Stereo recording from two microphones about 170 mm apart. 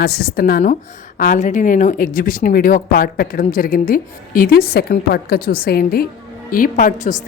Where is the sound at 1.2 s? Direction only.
50° left (ahead or behind).